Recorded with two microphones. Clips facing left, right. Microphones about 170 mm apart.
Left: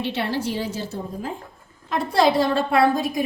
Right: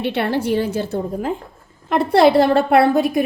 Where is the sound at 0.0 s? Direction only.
60° right (ahead or behind).